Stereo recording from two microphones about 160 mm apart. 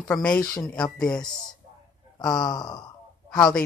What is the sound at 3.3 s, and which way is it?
Speech, 5° left (ahead or behind).